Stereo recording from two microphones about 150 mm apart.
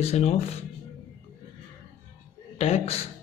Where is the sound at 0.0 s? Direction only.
45° left (ahead or behind).